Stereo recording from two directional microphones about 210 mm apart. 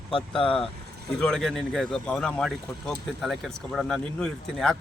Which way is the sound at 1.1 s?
5° left (ahead or behind).